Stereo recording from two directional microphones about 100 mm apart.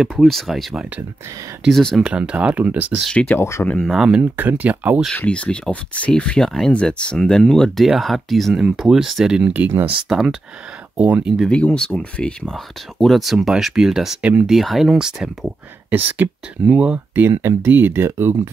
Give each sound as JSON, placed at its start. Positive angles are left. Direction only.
{"t": 0.1, "sound": "speech", "side_deg": 5}
{"t": 2.0, "sound": "speech", "side_deg": -10}
{"t": 3.0, "sound": "speech", "side_deg": 10}
{"t": 3.3, "sound": "speech", "side_deg": 30}
{"t": 3.8, "sound": "speech", "side_deg": -5}
{"t": 4.2, "sound": "speech", "side_deg": -20}
{"t": 5.1, "sound": "speech", "side_deg": 10}
{"t": 11.0, "sound": "speech", "side_deg": -15}
{"t": 11.2, "sound": "speech", "side_deg": -5}
{"t": 11.5, "sound": "speech", "side_deg": 10}